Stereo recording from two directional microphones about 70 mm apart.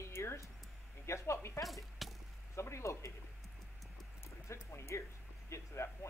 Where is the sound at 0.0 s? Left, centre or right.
Left.